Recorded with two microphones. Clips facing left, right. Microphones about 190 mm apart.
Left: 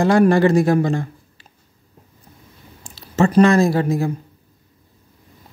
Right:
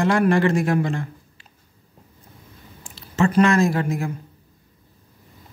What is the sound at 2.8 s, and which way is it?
Speech, 40° left (ahead or behind).